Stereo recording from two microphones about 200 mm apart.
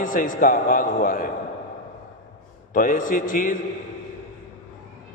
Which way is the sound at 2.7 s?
40° left (ahead or behind).